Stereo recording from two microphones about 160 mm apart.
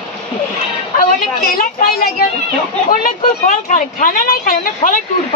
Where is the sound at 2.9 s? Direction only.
60° left (ahead or behind).